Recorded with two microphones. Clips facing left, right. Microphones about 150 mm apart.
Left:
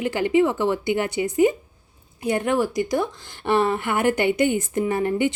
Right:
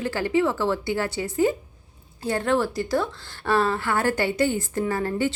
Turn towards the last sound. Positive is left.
turn(degrees=20)  # may be behind; listen again after turning